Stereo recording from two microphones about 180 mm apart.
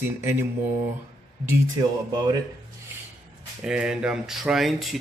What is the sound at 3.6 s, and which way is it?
Speech, 5° right (ahead or behind).